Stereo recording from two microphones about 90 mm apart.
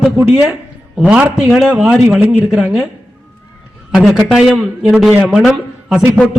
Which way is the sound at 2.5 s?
5° right (ahead or behind).